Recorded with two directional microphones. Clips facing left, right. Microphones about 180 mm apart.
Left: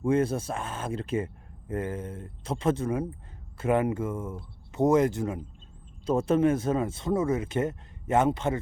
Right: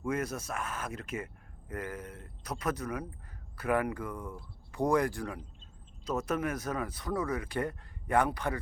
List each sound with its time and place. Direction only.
0.0 s speech: 30° left (ahead or behind)